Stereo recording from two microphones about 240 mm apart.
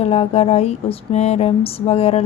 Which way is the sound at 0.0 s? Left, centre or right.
Left.